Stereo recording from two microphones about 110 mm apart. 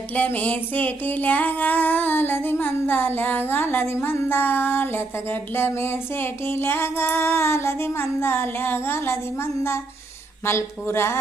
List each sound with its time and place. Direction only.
0.1 s music: 15° left (ahead or behind)